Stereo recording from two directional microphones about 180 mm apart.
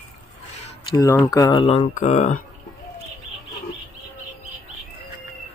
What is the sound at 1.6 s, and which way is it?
Mantra, 35° left (ahead or behind).